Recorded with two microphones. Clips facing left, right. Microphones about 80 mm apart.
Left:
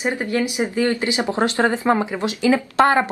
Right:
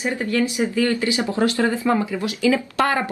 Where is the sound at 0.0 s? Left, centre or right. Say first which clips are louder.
Even; left.